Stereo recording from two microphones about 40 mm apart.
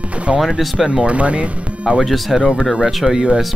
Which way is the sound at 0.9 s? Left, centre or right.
Right.